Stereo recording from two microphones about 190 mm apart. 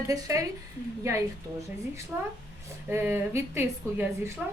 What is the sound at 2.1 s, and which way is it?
Speech, 10° right (ahead or behind).